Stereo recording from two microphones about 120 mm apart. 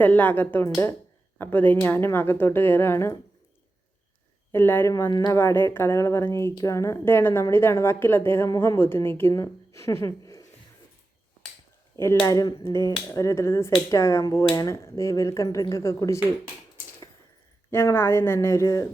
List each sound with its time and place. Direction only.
0.0 s speech: 15° left (ahead or behind)
4.5 s a woman's voice: 15° left (ahead or behind)
11.9 s a woman's voice: 20° left (ahead or behind)
17.7 s a woman's voice: 20° left (ahead or behind)